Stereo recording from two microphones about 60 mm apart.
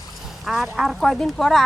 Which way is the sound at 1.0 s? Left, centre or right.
Centre.